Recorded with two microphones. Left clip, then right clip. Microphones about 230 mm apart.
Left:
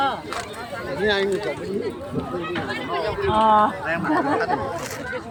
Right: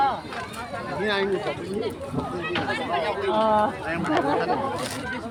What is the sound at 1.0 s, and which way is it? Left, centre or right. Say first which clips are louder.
Speech: left 4 dB; left.